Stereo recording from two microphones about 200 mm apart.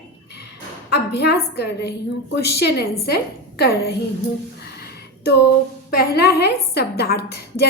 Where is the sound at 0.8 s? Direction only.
55° left (ahead or behind).